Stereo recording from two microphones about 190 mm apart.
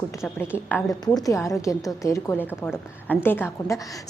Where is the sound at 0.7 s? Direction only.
20° left (ahead or behind).